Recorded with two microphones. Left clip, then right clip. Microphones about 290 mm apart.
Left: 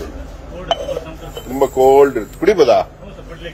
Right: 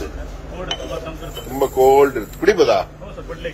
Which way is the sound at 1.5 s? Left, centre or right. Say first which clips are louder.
Left 3 dB; left.